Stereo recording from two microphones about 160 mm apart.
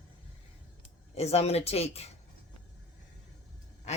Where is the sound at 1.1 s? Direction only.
40° left (ahead or behind).